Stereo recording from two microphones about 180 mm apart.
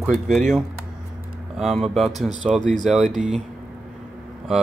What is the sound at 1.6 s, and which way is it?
Speech, centre (ahead or behind).